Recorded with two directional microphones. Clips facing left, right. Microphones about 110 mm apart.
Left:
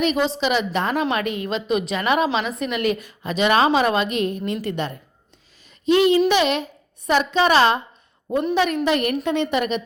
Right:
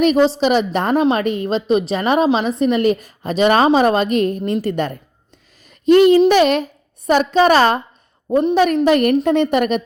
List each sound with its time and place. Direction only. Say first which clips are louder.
0.0 s a woman's voice: right 7 dB; 40° right (ahead or behind)
0.9 s a woman's voice: right 6 dB; 25° right (ahead or behind); by 9.8 s 50° right (ahead or behind)